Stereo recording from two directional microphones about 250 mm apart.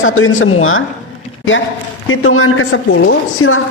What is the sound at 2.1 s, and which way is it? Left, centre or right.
A man's voice, left.